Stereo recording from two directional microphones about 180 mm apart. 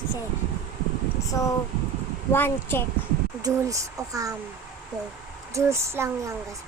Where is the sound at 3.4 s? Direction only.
20° right (ahead or behind).